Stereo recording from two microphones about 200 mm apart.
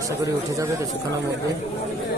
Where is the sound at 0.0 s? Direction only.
15° right (ahead or behind).